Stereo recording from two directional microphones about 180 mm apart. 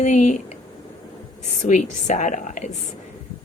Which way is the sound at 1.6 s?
40° left (ahead or behind).